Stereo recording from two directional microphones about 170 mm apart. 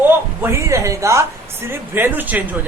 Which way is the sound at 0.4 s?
15° right (ahead or behind).